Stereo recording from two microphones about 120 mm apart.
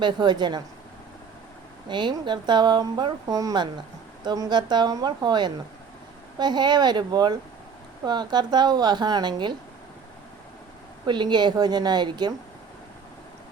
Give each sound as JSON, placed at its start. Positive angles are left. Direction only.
{"t": 0.0, "sound": "speech", "side_deg": -40}
{"t": 1.9, "sound": "speech", "side_deg": -40}
{"t": 11.0, "sound": "speech", "side_deg": -40}